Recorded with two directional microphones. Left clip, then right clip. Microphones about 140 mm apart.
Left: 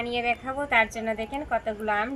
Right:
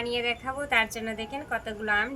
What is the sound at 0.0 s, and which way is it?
A woman's voice, 35° right (ahead or behind).